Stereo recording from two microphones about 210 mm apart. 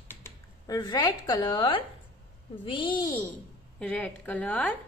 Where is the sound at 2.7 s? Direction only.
20° left (ahead or behind).